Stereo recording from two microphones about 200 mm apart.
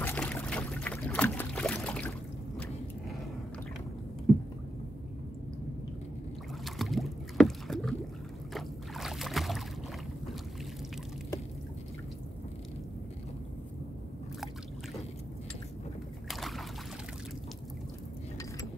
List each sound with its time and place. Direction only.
0.0 s boat: 10° left (ahead or behind)
6.6 s rowboat: centre (ahead or behind)
8.5 s boat: centre (ahead or behind)
16.3 s boat: centre (ahead or behind)